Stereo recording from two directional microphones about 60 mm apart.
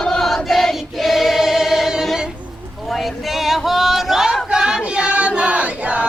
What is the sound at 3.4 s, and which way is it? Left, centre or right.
Choir, centre.